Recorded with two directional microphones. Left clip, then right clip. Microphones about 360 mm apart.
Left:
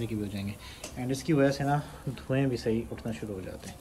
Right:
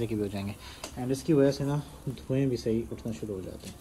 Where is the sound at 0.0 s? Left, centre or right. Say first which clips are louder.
Right 4 dB; centre.